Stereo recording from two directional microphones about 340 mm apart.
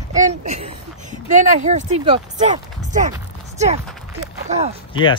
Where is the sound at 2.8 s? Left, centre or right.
Right.